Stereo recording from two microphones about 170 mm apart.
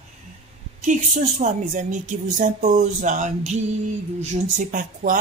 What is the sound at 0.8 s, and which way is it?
A man's voice, 45° right (ahead or behind).